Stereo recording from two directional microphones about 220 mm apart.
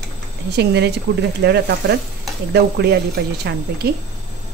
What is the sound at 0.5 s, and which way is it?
A woman's voice, 50° right (ahead or behind).